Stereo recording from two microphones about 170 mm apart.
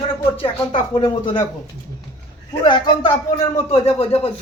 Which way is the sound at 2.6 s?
25° left (ahead or behind).